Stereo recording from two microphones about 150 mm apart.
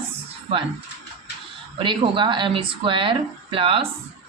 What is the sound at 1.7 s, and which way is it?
Speech, 35° right (ahead or behind).